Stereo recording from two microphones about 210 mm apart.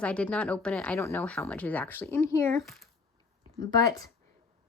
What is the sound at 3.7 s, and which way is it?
Speech, 15° left (ahead or behind).